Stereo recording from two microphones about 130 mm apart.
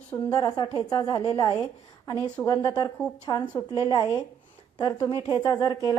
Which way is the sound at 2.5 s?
35° left (ahead or behind).